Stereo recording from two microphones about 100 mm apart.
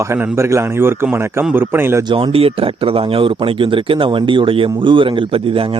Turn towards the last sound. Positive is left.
turn(degrees=-65)  # may be behind; listen again after turning